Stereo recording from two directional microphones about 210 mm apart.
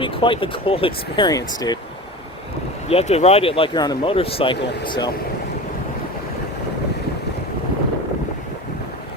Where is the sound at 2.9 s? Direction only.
30° left (ahead or behind).